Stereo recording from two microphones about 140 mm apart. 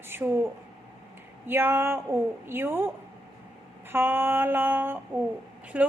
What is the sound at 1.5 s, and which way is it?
A woman's voice, 15° right (ahead or behind).